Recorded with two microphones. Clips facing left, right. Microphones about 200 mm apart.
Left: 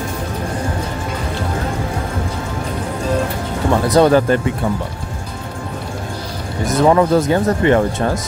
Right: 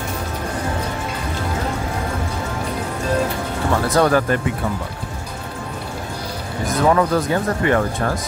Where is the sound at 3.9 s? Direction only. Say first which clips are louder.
Left 5 dB; 25° left (ahead or behind).